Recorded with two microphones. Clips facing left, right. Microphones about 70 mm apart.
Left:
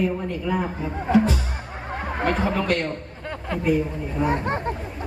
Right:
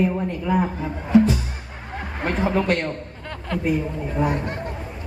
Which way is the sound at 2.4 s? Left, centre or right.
Right.